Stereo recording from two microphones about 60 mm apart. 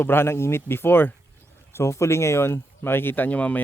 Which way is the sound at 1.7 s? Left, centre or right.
Left.